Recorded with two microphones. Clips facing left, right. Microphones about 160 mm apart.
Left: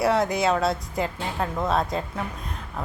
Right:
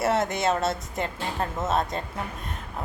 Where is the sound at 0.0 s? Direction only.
Centre (ahead or behind).